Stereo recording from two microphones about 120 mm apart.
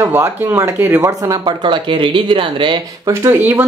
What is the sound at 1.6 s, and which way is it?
Speech, 45° right (ahead or behind).